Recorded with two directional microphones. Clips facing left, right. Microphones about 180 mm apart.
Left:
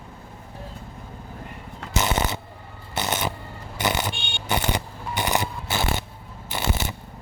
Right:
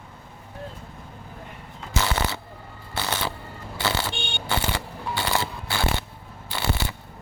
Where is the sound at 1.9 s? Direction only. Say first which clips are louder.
Left 2 dB; 20° left (ahead or behind).